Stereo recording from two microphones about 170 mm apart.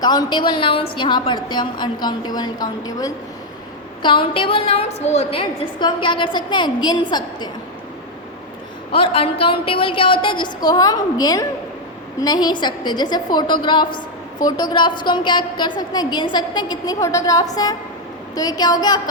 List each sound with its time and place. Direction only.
0.0 s a woman's voice: 25° left (ahead or behind)
8.9 s a woman's voice: 35° left (ahead or behind)